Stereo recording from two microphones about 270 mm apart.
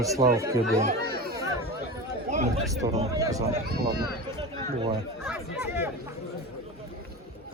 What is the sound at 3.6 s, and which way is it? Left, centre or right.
Speech, right.